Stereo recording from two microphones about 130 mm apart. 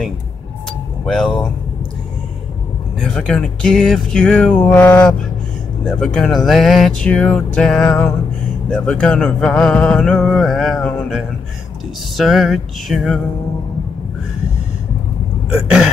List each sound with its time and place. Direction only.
1.0 s speech: 5° left (ahead or behind)
3.0 s speech: 5° left (ahead or behind)
5.9 s speech: 5° left (ahead or behind)
12.2 s speech: centre (ahead or behind)